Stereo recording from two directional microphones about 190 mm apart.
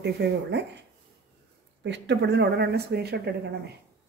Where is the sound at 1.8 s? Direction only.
65° right (ahead or behind).